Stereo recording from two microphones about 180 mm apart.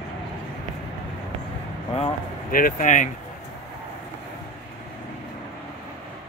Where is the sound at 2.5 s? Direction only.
50° left (ahead or behind).